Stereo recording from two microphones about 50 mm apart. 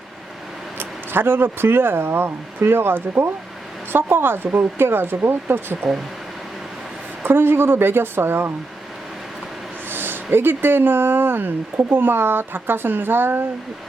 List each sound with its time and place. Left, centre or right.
0.8 s speech: right
7.2 s speech: right
9.9 s a sound: right
10.3 s speech: right